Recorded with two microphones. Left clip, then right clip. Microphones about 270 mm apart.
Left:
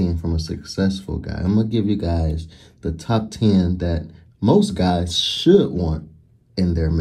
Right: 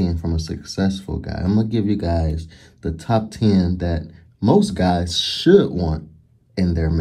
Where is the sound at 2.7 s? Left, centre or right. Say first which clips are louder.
Right 2 dB; centre.